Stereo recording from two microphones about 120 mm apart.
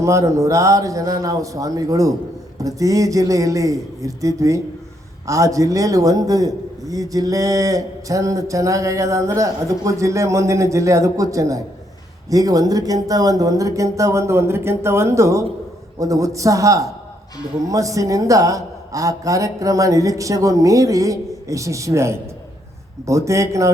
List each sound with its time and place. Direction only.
0.0 s a man's voice: 25° right (ahead or behind)